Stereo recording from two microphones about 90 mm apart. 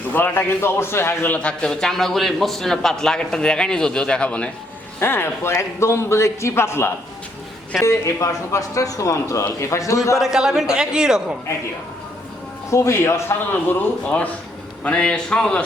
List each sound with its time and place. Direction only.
0.1 s a man's voice: 20° left (ahead or behind)
4.9 s a man's voice: 25° left (ahead or behind)
10.2 s a man's voice: 5° right (ahead or behind)
12.7 s a man's voice: 30° left (ahead or behind); by 15.6 s 10° left (ahead or behind)